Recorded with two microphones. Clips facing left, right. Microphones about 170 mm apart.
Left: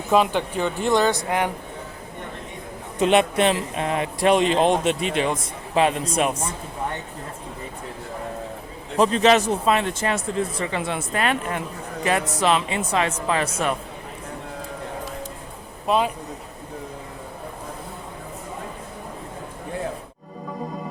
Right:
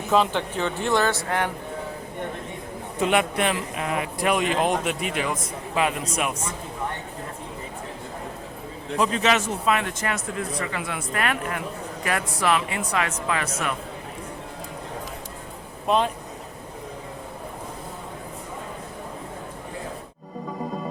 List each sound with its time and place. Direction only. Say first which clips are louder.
0.1 s speech: left 2 dB; 15° left (ahead or behind)
3.0 s speech: left 4 dB; 25° left (ahead or behind)
9.0 s speech: left 5 dB; 35° left (ahead or behind)
15.9 s speech: left 1 dB; 5° left (ahead or behind)